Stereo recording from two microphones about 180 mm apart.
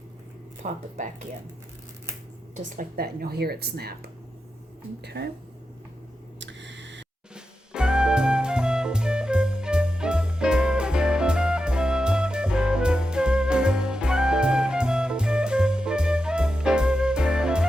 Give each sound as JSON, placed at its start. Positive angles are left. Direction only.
{"t": 0.6, "sound": "speech", "side_deg": -40}
{"t": 2.6, "sound": "speech", "side_deg": -45}
{"t": 6.4, "sound": "a sound", "side_deg": -80}
{"t": 7.3, "sound": "music", "side_deg": -5}